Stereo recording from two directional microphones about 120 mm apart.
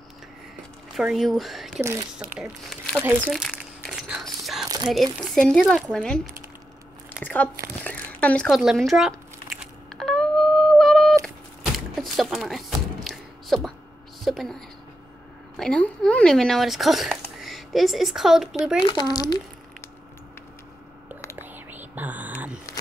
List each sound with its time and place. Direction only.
0.9 s speech: centre (ahead or behind)
1.8 s speech: 25° right (ahead or behind)
2.1 s speech: 5° right (ahead or behind)
3.4 s crumpling: 5° left (ahead or behind)
3.9 s biting: centre (ahead or behind)
4.8 s speech: centre (ahead or behind)
7.2 s speech: 10° right (ahead or behind)
7.8 s a sound: 10° left (ahead or behind)
8.5 s speech: 5° right (ahead or behind)
9.9 s a sound: 5° left (ahead or behind)
15.5 s speech: 5° left (ahead or behind)
18.8 s speech: 40° left (ahead or behind)
21.4 s whispering: 15° right (ahead or behind)